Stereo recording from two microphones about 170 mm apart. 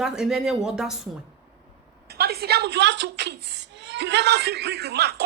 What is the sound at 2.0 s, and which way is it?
Speech, 70° right (ahead or behind).